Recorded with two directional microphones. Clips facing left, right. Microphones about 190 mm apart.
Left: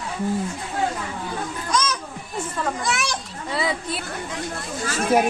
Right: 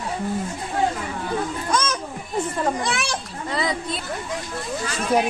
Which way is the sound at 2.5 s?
30° right (ahead or behind).